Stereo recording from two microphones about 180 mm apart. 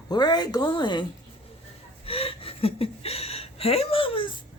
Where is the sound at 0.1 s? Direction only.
25° left (ahead or behind).